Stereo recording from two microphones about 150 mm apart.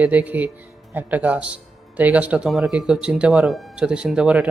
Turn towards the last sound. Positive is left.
turn(degrees=-5)  # may be behind; listen again after turning